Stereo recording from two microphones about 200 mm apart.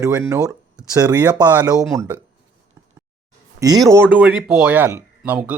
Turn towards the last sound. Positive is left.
turn(degrees=-10)  # may be behind; listen again after turning